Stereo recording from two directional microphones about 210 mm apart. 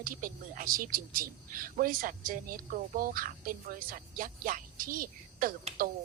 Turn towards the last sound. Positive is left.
turn(degrees=-40)  # may be behind; listen again after turning